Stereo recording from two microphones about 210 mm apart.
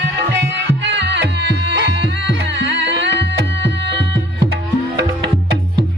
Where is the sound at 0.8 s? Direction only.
55° right (ahead or behind).